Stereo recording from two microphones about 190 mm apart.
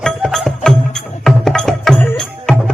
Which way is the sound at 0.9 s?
Centre (ahead or behind).